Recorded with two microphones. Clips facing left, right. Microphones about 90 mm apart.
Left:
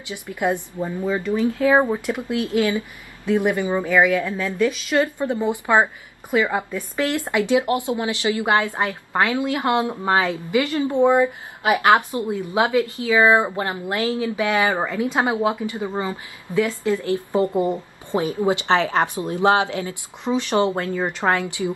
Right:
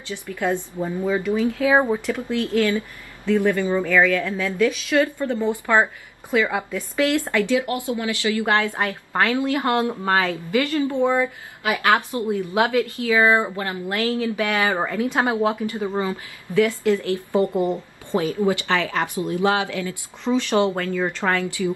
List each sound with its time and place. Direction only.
0.1 s speech: 15° left (ahead or behind)
1.0 s speech: 5° right (ahead or behind)
1.8 s speech: 10° left (ahead or behind)